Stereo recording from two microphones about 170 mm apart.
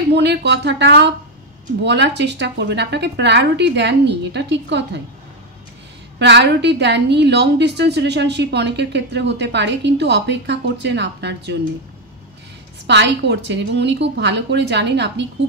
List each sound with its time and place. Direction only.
0.1 s a woman's voice: 85° right
6.1 s a woman's voice: 90° right
12.8 s a woman's voice: 90° right